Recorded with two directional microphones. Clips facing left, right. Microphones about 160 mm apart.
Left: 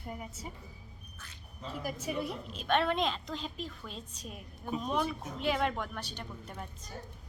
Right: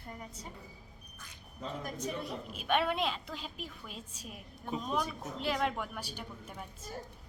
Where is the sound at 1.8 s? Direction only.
5° left (ahead or behind).